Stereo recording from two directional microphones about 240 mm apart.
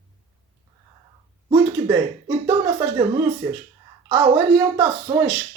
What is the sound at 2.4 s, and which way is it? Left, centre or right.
Speech, centre.